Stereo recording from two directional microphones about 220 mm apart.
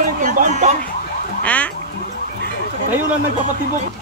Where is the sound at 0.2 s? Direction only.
35° right (ahead or behind).